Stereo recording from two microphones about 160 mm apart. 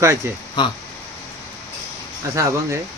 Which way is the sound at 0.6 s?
30° left (ahead or behind).